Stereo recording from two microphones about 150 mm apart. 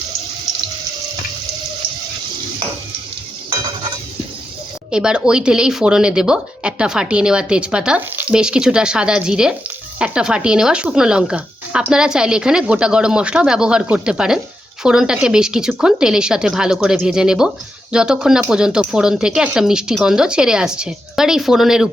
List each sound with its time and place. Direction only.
4.9 s speech: 5° right (ahead or behind)